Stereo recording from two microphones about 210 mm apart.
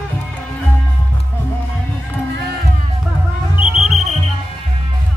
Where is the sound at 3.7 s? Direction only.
30° left (ahead or behind).